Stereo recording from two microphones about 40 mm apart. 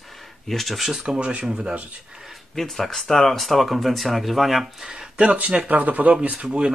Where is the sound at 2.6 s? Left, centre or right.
Centre.